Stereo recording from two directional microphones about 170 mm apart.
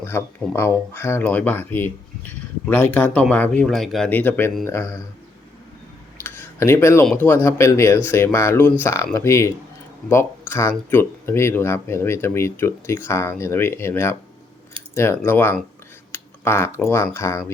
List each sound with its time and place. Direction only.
0.0 s speech: 15° left (ahead or behind)
6.1 s speech: 15° left (ahead or behind)